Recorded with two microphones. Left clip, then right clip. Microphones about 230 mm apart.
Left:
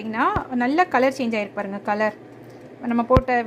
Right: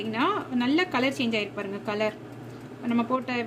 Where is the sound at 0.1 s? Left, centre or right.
Centre.